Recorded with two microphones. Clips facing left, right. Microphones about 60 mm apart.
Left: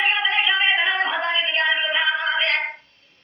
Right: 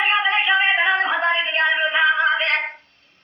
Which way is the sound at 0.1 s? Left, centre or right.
Right.